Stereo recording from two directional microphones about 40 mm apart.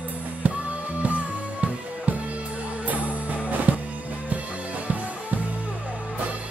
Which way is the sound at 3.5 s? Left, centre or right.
Right.